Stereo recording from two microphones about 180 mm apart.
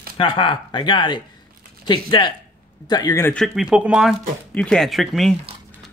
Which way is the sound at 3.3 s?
Centre (ahead or behind).